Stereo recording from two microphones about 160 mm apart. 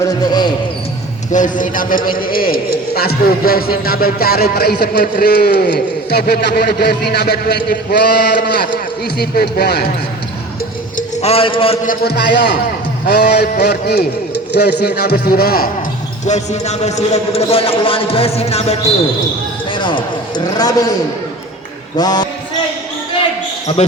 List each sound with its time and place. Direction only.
0.0 s speech: 25° left (ahead or behind)
1.3 s a man's voice: 55° left (ahead or behind); by 9.9 s 80° left
10.9 s a man's voice: 40° left (ahead or behind)
11.9 s a sound: 90° left
14.5 s a man's voice: 90° left; by 15.7 s 70° left (ahead or behind)
16.2 s a man's voice: 45° left (ahead or behind)
19.7 s a man's voice: 30° left (ahead or behind)
21.9 s speech: 25° left (ahead or behind)